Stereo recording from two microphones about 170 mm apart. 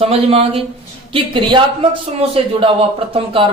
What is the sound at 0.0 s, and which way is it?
A man's voice, 35° right (ahead or behind).